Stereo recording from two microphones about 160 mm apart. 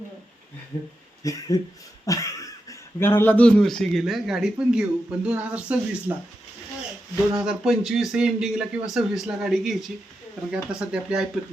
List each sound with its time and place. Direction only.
1.2 s speech: 20° left (ahead or behind); by 6.1 s 10° right (ahead or behind)
7.3 s speech: 5° right (ahead or behind)